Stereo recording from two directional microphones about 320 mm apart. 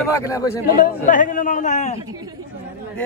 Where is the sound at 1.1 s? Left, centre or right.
Left.